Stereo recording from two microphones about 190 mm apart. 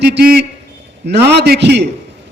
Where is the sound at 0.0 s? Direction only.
60° right (ahead or behind).